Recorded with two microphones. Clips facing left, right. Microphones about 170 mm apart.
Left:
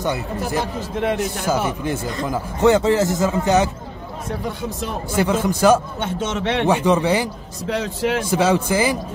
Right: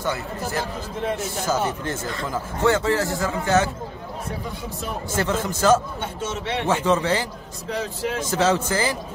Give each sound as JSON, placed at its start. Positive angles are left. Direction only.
{"t": 1.0, "sound": "a man's voice", "side_deg": 70}
{"t": 1.5, "sound": "a man's voice", "side_deg": 15}
{"t": 5.1, "sound": "a man's voice", "side_deg": 15}
{"t": 5.9, "sound": "speech", "side_deg": 90}
{"t": 6.7, "sound": "a man's voice", "side_deg": 15}
{"t": 7.7, "sound": "speech", "side_deg": 85}
{"t": 8.2, "sound": "a man's voice", "side_deg": 10}